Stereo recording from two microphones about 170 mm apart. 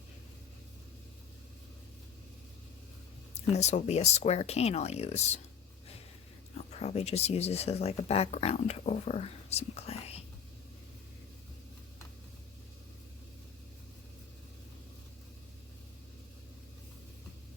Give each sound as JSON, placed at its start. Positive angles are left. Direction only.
{"t": 3.3, "sound": "speech", "side_deg": 40}
{"t": 6.6, "sound": "speech", "side_deg": 40}